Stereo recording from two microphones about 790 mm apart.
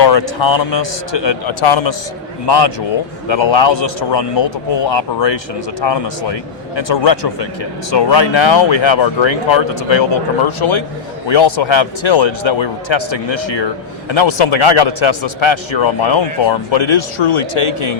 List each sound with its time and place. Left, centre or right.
0.0 s a man's voice: left